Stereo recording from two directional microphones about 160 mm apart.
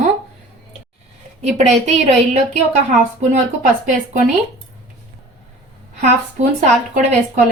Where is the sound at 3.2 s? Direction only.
50° right (ahead or behind).